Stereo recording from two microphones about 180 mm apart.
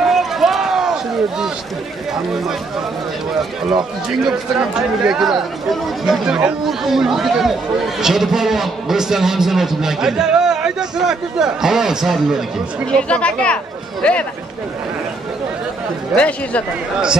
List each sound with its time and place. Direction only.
0.0 s basketball bounce: centre (ahead or behind)
4.3 s speech: 5° right (ahead or behind)
16.2 s speech: 5° left (ahead or behind)